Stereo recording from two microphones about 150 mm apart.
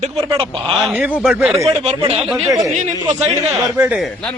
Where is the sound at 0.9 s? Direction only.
10° right (ahead or behind).